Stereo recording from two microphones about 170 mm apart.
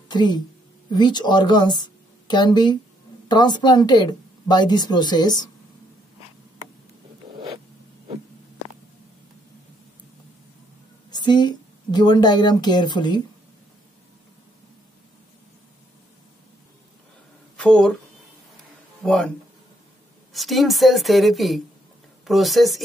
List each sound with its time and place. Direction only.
0.1 s a woman's voice: 25° left (ahead or behind)
11.1 s a woman's voice: 25° left (ahead or behind)
17.6 s speech: 5° left (ahead or behind)
19.0 s a woman's voice: 5° left (ahead or behind)
20.3 s a woman's voice: centre (ahead or behind)